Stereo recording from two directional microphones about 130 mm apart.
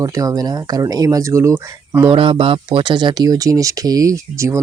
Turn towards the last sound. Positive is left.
turn(degrees=-20)  # may be behind; listen again after turning